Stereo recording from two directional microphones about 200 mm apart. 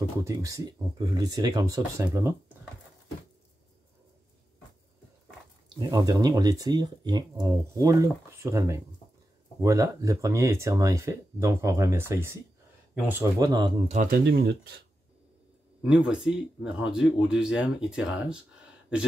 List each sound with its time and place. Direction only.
0.2 s speech: 15° right (ahead or behind)
5.8 s speech: 20° right (ahead or behind)
14.1 s speech: 50° right (ahead or behind)
15.8 s speech: 5° right (ahead or behind)